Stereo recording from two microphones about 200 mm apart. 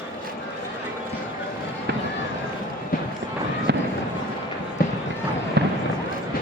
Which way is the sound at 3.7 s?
55° right (ahead or behind).